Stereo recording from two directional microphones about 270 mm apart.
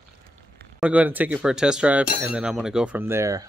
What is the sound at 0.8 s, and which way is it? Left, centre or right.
Speech, centre.